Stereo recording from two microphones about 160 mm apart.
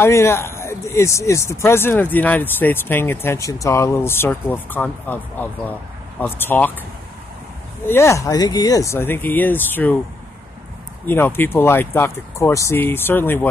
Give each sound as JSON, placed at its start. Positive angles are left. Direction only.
{"t": 0.0, "sound": "speech", "side_deg": 15}
{"t": 7.8, "sound": "speech", "side_deg": 15}
{"t": 11.1, "sound": "speech", "side_deg": 15}